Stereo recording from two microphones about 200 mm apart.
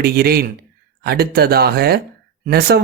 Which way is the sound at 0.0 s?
50° right (ahead or behind).